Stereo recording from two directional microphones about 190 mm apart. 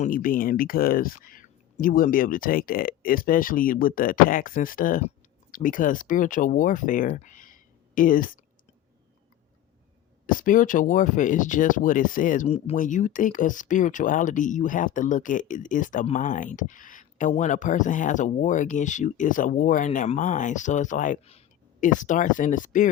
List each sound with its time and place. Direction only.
0.0 s speech: 45° left (ahead or behind)
10.2 s speech: 45° left (ahead or behind)